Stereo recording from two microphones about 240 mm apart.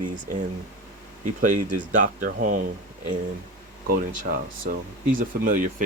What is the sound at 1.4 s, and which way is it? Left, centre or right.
Speech, right.